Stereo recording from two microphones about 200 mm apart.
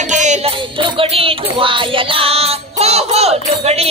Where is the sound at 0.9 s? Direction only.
25° right (ahead or behind).